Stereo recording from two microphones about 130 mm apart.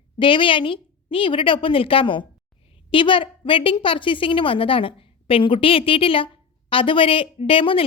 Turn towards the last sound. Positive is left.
turn(degrees=45)  # may be behind; listen again after turning